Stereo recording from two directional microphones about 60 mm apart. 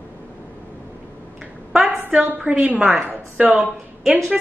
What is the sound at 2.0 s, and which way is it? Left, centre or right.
A woman's voice, right.